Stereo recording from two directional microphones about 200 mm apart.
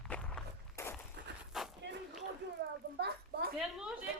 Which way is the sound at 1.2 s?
60° right (ahead or behind).